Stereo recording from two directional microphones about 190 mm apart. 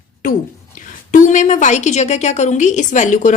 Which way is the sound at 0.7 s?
45° left (ahead or behind).